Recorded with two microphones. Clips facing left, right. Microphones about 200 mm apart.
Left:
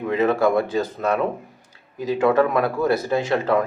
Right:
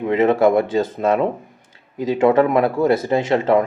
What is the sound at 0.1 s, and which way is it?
Speech, 25° right (ahead or behind).